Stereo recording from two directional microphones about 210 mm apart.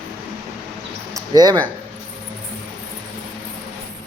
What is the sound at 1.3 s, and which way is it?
Speech, 20° right (ahead or behind).